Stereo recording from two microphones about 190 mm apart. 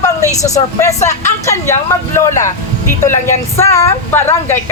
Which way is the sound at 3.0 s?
15° left (ahead or behind).